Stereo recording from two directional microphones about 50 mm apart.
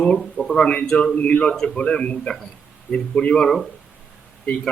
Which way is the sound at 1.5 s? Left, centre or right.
Centre.